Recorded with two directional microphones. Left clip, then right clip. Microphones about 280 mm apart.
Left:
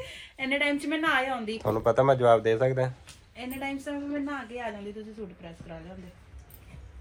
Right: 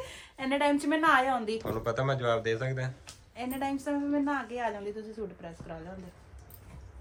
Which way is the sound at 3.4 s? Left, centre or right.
Centre.